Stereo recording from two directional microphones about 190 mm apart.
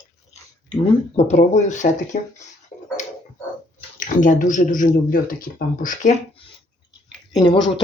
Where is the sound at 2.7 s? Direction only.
40° left (ahead or behind).